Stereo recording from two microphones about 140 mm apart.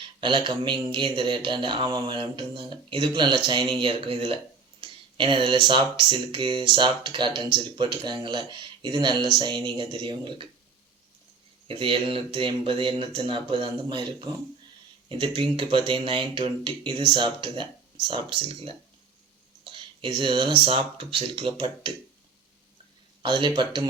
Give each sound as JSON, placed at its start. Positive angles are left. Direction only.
{"t": 0.2, "sound": "speech", "side_deg": -35}
{"t": 11.7, "sound": "speech", "side_deg": -40}
{"t": 23.2, "sound": "speech", "side_deg": -35}